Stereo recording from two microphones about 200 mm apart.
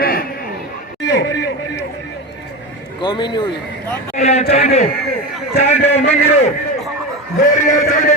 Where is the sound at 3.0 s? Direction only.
25° left (ahead or behind).